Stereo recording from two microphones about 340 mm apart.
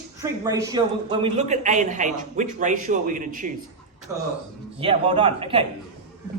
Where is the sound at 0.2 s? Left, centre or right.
Centre.